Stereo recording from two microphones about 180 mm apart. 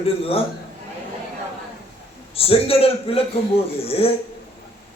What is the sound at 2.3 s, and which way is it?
Speech, 30° left (ahead or behind).